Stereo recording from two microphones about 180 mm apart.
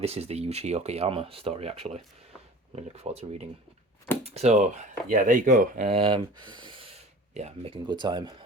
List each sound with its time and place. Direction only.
0.0 s speech: 35° right (ahead or behind)
5.9 s speech: 30° right (ahead or behind)